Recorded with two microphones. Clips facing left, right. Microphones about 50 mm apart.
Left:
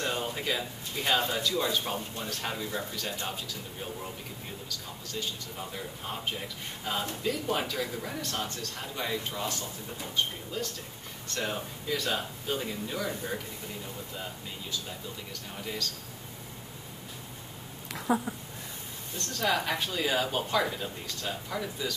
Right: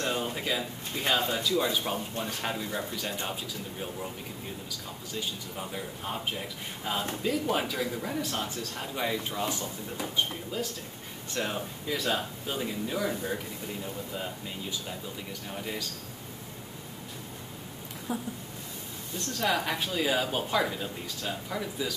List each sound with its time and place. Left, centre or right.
0.0 s a man's voice: centre
4.6 s a man's voice: centre
15.6 s a man's voice: centre
18.1 s speech: left
19.1 s speech: centre